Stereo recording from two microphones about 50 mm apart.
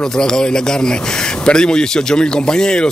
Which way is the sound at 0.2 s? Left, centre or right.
Centre.